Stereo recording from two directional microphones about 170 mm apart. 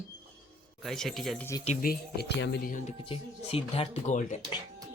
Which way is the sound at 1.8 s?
65° left (ahead or behind).